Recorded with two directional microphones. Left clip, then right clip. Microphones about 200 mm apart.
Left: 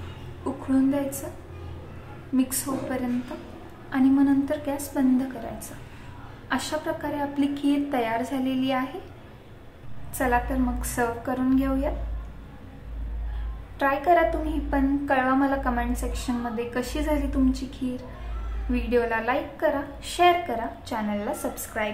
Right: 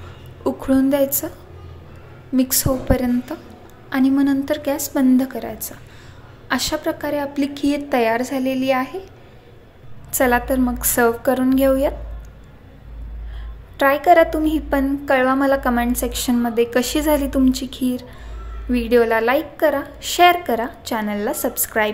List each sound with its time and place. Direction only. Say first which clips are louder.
0.4 s a woman's voice: right 7 dB; 40° right (ahead or behind)
6.5 s a woman's voice: right 6 dB; 30° right (ahead or behind)
10.1 s a woman's voice: right 7 dB; 40° right (ahead or behind)
13.7 s a woman's voice: right 8 dB; 35° right (ahead or behind)